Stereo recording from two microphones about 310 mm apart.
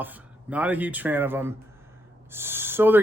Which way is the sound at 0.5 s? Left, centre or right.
Centre.